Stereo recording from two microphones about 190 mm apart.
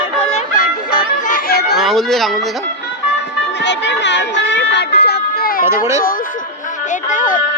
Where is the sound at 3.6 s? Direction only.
65° left (ahead or behind); by 5.6 s 50° left (ahead or behind).